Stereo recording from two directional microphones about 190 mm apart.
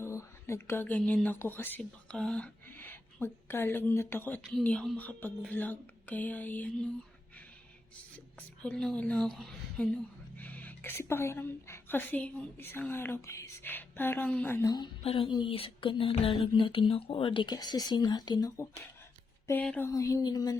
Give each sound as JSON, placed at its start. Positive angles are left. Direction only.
{"t": 0.0, "sound": "speech", "side_deg": 15}
{"t": 8.4, "sound": "a woman's voice", "side_deg": 5}
{"t": 15.0, "sound": "a sound", "side_deg": 30}
{"t": 19.5, "sound": "a woman's voice", "side_deg": 10}